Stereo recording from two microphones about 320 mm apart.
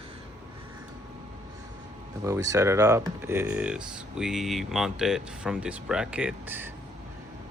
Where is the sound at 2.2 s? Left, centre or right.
Centre.